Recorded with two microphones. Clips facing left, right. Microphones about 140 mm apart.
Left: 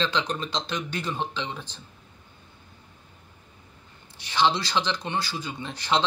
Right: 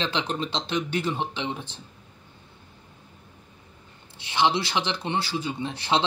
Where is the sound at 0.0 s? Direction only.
25° right (ahead or behind).